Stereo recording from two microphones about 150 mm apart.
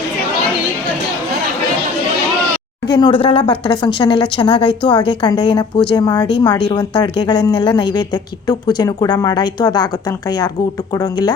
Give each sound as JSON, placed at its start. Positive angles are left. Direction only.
{"t": 2.8, "sound": "speech", "side_deg": 30}